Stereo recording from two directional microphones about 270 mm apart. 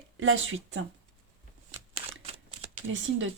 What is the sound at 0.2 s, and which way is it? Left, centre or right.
Speech, right.